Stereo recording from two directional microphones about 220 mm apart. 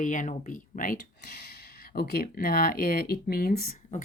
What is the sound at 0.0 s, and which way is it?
Speech, 35° left (ahead or behind).